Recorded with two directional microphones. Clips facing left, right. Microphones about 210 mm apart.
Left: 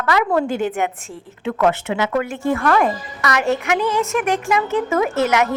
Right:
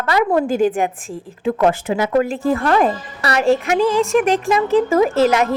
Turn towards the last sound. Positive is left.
turn(degrees=-30)  # may be behind; listen again after turning